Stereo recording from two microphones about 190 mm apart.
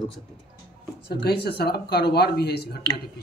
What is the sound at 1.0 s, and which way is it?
Speech, 60° left (ahead or behind).